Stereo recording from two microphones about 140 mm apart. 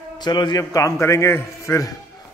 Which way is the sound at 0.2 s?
30° left (ahead or behind).